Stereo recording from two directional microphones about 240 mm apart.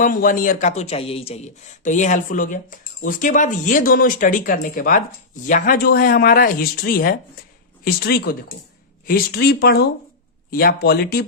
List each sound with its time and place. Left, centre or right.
0.0 s speech: left